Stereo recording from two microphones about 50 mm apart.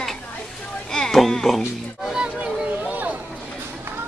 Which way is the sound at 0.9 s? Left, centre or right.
Centre.